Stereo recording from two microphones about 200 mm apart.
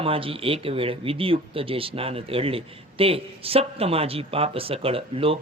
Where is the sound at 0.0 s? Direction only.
25° right (ahead or behind).